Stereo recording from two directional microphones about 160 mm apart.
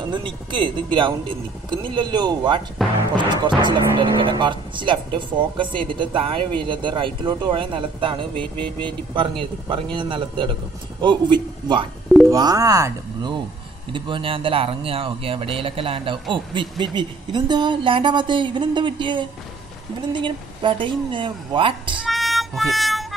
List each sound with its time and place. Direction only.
0.1 s speech: 30° right (ahead or behind)
8.4 s speech: 10° left (ahead or behind)
8.8 s speech: 30° right (ahead or behind)
22.0 s music: centre (ahead or behind)